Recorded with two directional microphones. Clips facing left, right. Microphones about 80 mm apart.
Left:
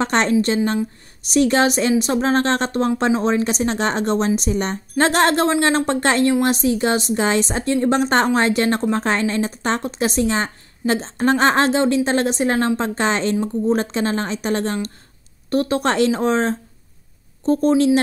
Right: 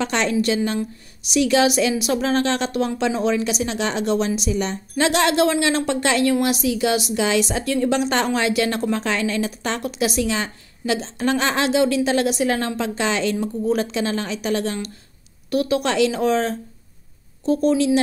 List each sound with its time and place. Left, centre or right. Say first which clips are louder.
0.0 s a woman's voice: left 3 dB; left